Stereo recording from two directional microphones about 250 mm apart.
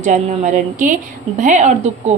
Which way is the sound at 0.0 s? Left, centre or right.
Right.